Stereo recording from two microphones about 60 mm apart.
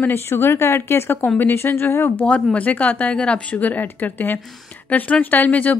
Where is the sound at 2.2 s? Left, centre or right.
Left.